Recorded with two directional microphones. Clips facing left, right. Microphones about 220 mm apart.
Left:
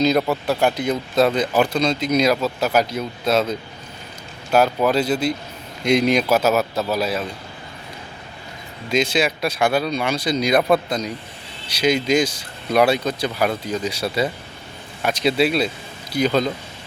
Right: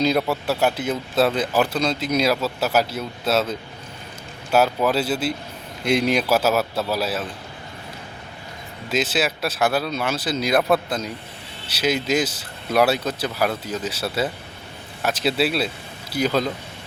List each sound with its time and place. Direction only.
0.0 s speech: 10° right (ahead or behind)
8.9 s speech: 5° right (ahead or behind)